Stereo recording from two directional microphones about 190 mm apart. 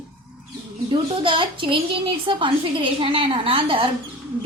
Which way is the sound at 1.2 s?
25° right (ahead or behind).